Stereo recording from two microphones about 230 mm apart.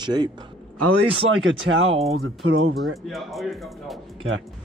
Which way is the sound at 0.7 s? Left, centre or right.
Right.